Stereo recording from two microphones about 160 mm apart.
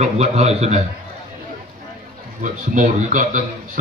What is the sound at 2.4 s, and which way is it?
Speech, 50° right (ahead or behind).